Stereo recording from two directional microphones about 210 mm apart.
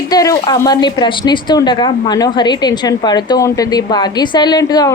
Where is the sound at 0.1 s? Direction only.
15° left (ahead or behind).